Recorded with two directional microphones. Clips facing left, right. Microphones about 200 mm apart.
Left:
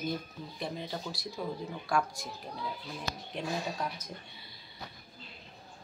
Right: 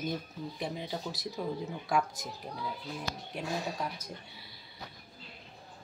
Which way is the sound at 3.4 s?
5° right (ahead or behind).